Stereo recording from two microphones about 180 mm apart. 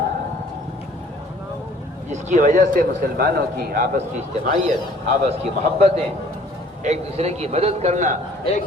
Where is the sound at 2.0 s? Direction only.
45° right (ahead or behind).